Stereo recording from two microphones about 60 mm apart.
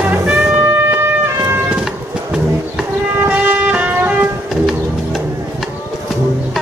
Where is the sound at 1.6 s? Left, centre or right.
Centre.